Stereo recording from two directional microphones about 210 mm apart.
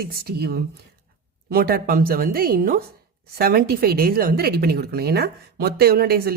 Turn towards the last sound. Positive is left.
turn(degrees=-45)  # may be behind; listen again after turning